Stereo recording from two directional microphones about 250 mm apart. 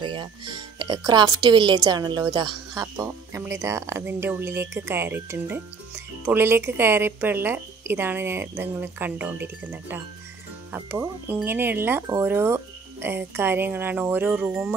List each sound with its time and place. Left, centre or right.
0.0 s music: centre
0.7 s a woman's voice: centre